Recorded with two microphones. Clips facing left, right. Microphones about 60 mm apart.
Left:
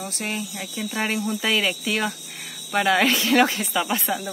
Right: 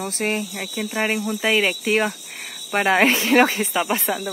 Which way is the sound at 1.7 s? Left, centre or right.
Right.